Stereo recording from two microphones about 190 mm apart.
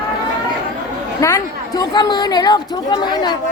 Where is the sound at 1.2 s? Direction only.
20° left (ahead or behind).